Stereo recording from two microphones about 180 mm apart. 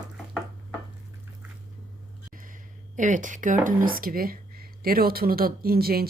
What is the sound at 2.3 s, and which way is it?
Speech, 50° right (ahead or behind).